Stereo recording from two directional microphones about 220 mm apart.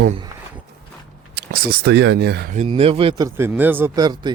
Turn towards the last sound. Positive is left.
turn(degrees=-20)  # may be behind; listen again after turning